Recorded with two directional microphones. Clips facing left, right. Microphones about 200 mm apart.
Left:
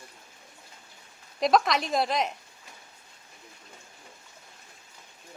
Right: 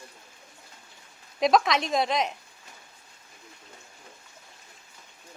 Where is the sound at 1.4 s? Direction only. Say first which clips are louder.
Right 1 dB; centre (ahead or behind).